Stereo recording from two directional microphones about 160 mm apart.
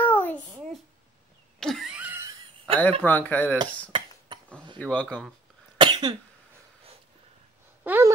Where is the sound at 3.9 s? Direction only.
30° right (ahead or behind).